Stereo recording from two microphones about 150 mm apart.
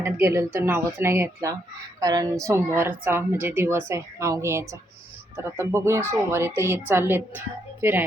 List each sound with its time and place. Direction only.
0.0 s a woman's voice: 20° right (ahead or behind)